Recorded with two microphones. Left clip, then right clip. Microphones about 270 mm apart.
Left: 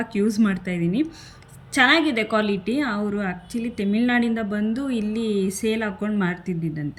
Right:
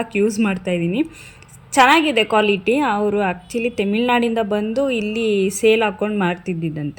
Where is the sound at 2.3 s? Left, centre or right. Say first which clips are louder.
Right 8 dB; right.